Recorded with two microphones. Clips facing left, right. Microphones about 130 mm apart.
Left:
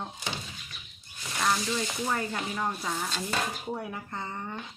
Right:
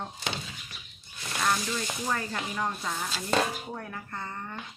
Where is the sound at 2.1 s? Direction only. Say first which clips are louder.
Left 1 dB; 10° left (ahead or behind).